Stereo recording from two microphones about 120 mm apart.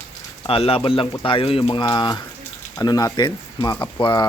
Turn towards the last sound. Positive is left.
turn(degrees=40)  # may be behind; listen again after turning